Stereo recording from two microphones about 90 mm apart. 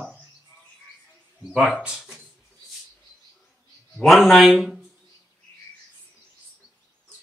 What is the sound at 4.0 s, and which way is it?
Speech, centre (ahead or behind).